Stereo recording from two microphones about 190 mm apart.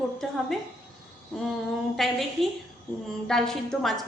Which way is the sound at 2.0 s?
Centre (ahead or behind).